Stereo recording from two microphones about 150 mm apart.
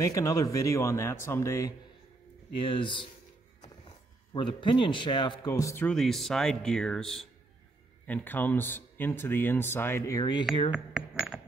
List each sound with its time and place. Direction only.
0.0 s speech: 20° left (ahead or behind)
2.5 s speech: 35° left (ahead or behind)
4.3 s speech: 35° left (ahead or behind)
5.9 s speech: centre (ahead or behind); by 10.4 s 25° left (ahead or behind)
10.7 s speech: 5° right (ahead or behind)
11.3 s a sound: centre (ahead or behind)